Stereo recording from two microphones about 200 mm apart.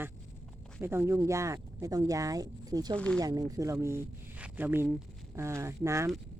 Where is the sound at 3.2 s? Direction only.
20° right (ahead or behind).